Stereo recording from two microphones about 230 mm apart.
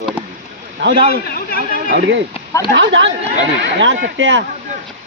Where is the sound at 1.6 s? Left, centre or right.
Right.